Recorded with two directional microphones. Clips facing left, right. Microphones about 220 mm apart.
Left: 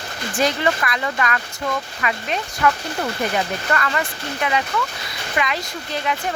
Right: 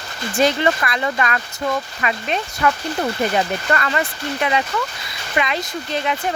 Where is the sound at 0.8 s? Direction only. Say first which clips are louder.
Right 2 dB; 30° right (ahead or behind).